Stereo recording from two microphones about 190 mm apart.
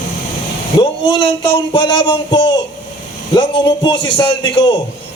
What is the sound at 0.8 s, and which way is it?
Speech, 25° left (ahead or behind).